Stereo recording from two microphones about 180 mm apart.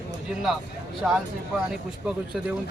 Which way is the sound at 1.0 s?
5° right (ahead or behind).